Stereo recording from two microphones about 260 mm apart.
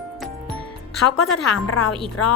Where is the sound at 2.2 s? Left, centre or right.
Left.